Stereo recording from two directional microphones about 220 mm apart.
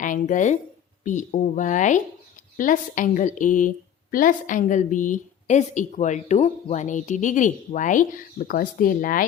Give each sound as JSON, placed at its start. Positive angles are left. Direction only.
{"t": 0.0, "sound": "a woman's voice", "side_deg": 35}